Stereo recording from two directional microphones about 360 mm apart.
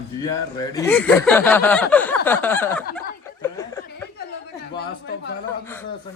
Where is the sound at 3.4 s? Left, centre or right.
Centre.